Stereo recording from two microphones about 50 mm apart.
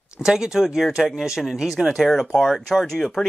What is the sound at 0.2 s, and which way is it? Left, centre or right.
Speech, centre.